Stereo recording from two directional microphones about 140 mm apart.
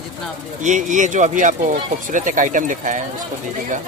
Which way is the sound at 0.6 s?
65° right (ahead or behind).